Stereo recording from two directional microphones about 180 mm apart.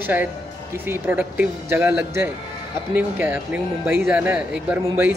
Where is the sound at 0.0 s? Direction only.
10° right (ahead or behind).